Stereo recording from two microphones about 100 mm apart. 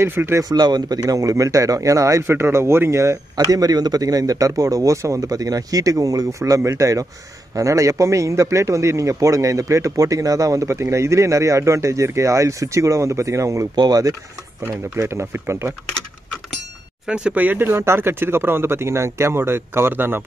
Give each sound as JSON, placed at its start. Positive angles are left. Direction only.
{"t": 0.0, "sound": "speech", "side_deg": -25}
{"t": 0.4, "sound": "speech", "side_deg": -40}
{"t": 15.0, "sound": "speech", "side_deg": -25}
{"t": 17.0, "sound": "speech", "side_deg": -10}